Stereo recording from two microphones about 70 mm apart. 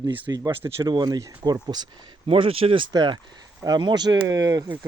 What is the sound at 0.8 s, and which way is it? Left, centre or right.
Speech, right.